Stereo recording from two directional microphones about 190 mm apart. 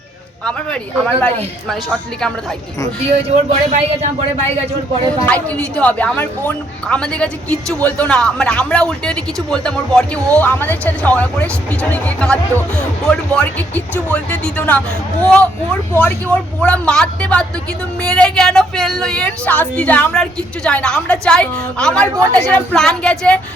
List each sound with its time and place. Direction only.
0.4 s speech: 5° left (ahead or behind)
3.2 s speech: 35° right (ahead or behind)
5.2 s a woman's voice: 5° left (ahead or behind)